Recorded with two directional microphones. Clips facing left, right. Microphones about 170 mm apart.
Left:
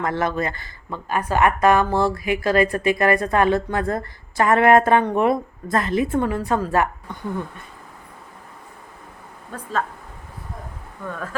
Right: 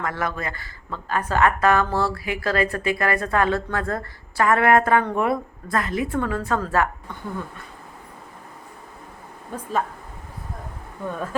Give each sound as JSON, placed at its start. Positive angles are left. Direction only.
{"t": 0.0, "sound": "speech", "side_deg": 25}
{"t": 9.5, "sound": "speech", "side_deg": -15}
{"t": 11.1, "sound": "speech", "side_deg": -20}